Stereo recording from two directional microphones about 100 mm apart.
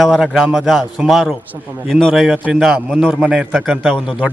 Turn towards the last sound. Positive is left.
turn(degrees=-10)  # may be behind; listen again after turning